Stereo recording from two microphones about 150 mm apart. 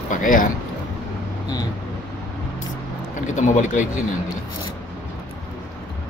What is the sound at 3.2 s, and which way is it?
Speech, 55° left (ahead or behind).